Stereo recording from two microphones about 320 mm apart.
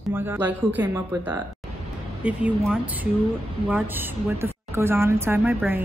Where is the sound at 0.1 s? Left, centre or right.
Centre.